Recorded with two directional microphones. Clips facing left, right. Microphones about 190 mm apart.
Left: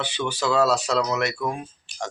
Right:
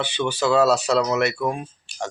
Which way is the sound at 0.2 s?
25° right (ahead or behind).